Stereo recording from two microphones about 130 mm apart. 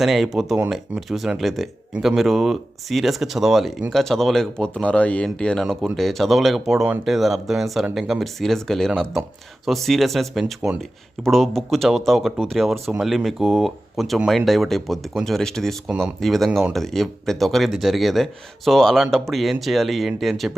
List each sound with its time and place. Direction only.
0.0 s speech: centre (ahead or behind)